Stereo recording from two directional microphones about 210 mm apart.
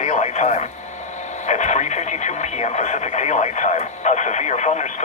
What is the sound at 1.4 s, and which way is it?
Speech, 35° left (ahead or behind).